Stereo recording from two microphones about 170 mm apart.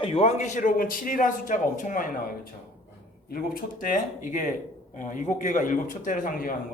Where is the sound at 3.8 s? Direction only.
50° left (ahead or behind).